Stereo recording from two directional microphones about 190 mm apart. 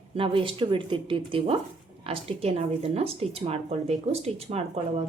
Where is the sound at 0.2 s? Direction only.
30° right (ahead or behind).